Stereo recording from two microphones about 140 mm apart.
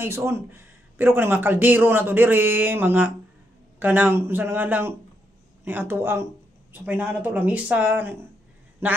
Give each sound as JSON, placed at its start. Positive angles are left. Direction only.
{"t": 0.0, "sound": "speech", "side_deg": -20}